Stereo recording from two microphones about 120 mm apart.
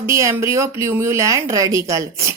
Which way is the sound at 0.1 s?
25° right (ahead or behind).